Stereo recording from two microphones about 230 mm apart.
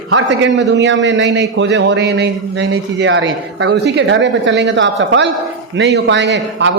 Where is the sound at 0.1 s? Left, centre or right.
Right.